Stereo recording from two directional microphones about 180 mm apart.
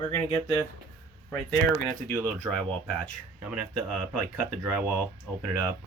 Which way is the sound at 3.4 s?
5° right (ahead or behind).